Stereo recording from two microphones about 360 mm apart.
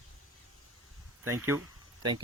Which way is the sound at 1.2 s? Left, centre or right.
Centre.